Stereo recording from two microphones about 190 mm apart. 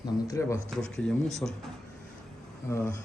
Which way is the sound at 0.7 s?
5° left (ahead or behind).